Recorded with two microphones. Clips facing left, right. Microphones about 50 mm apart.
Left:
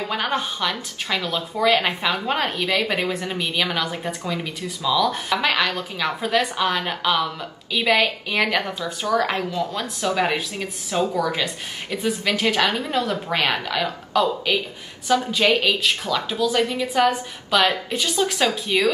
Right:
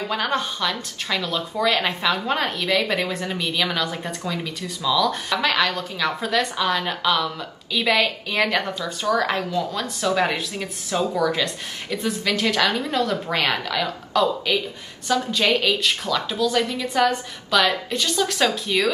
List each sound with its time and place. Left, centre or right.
0.1 s speech: centre